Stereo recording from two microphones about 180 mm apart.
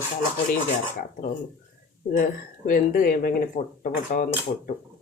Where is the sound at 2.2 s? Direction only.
50° left (ahead or behind).